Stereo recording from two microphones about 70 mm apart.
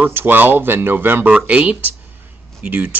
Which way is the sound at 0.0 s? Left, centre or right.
Right.